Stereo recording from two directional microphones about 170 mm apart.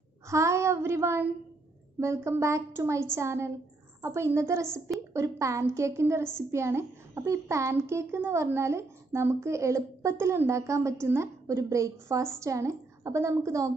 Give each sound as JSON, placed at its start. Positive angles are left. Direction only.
{"t": 0.3, "sound": "a woman's voice", "side_deg": -15}